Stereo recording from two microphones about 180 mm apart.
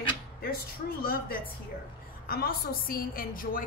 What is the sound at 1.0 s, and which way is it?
Speech, 55° left (ahead or behind).